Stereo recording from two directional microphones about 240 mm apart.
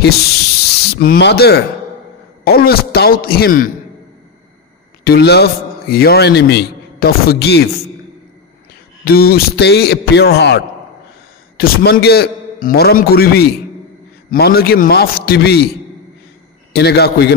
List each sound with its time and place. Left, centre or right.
0.9 s a man's voice: left
5.0 s a man's voice: left
9.0 s a man's voice: left
16.7 s a man's voice: left